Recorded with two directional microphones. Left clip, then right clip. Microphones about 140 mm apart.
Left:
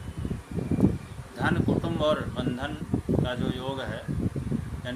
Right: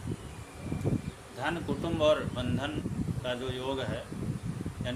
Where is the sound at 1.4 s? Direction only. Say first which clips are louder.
Left 6 dB; 10° left (ahead or behind).